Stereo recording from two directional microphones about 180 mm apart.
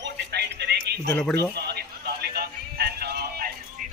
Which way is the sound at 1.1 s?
10° left (ahead or behind).